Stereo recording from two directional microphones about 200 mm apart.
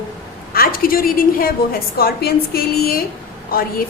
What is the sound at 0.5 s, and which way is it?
A woman's voice, 45° left (ahead or behind).